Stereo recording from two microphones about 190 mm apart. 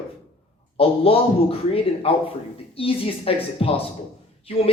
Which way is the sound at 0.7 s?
30° left (ahead or behind).